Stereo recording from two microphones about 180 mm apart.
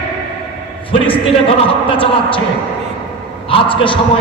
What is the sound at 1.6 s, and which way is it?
Speech, 30° left (ahead or behind).